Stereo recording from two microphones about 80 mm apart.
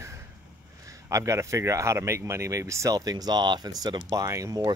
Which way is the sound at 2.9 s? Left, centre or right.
Right.